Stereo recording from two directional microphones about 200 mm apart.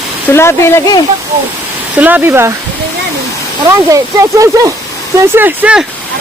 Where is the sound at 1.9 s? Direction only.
10° right (ahead or behind).